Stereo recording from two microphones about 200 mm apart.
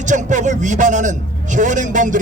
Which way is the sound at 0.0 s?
40° right (ahead or behind).